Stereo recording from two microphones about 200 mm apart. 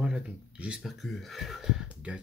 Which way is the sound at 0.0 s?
5° right (ahead or behind).